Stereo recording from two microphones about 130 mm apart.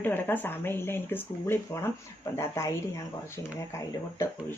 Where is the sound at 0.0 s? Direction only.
15° left (ahead or behind).